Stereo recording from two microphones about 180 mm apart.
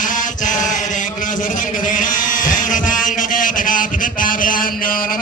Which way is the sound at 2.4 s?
45° left (ahead or behind).